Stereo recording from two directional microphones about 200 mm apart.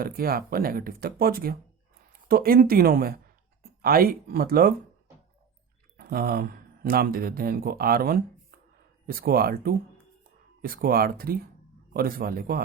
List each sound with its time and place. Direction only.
0.0 s speech: 50° right (ahead or behind)
6.0 s speech: 50° right (ahead or behind)